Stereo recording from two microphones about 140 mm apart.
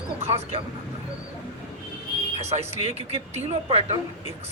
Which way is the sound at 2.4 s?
50° right (ahead or behind).